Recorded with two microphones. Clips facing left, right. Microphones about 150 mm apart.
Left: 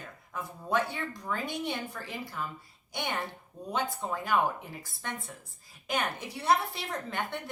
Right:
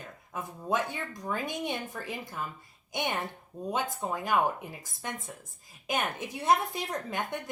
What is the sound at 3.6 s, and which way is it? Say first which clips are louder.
Speech: right 1 dB; 20° right (ahead or behind).